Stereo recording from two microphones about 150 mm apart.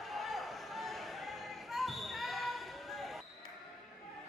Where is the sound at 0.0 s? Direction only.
Centre (ahead or behind).